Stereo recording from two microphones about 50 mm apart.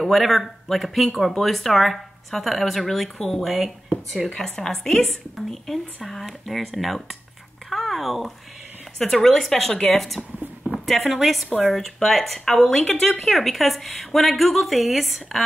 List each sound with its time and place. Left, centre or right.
0.0 s speech: centre
4.3 s a woman's voice: centre
7.7 s a sound: centre
8.9 s a woman's voice: centre
10.6 s a sound: centre
11.1 s speech: centre